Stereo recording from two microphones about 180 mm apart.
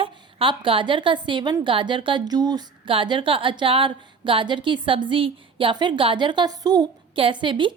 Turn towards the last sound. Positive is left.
turn(degrees=-25)  # may be behind; listen again after turning